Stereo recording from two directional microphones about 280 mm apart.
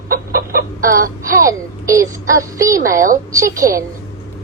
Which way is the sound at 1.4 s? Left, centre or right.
Centre.